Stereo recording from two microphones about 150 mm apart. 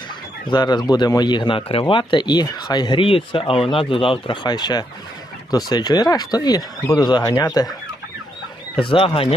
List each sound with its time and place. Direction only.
0.5 s speech: 30° left (ahead or behind)
8.8 s speech: 35° left (ahead or behind)